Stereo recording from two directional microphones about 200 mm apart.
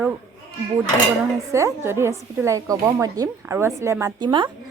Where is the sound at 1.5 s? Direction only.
15° right (ahead or behind).